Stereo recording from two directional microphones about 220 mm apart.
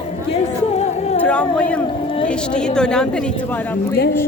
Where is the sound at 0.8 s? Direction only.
30° left (ahead or behind).